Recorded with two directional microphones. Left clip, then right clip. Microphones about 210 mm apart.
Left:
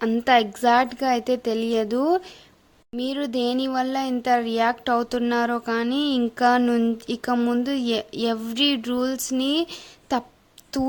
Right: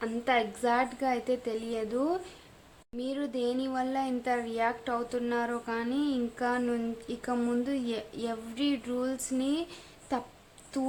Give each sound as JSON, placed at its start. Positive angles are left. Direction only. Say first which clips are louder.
{"t": 0.0, "sound": "speech", "louder": "left 10 dB", "side_deg": 40}